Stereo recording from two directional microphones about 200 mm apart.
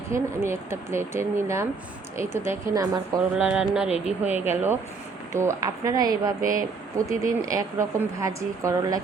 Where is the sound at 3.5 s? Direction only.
5° right (ahead or behind).